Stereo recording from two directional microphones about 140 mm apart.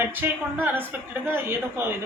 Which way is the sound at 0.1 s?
15° right (ahead or behind).